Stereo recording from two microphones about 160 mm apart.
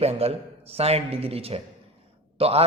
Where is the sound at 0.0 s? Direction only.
40° right (ahead or behind).